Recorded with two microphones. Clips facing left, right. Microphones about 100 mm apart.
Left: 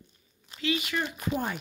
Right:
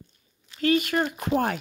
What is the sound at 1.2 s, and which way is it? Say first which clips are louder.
Speech: right 6 dB; 70° right (ahead or behind).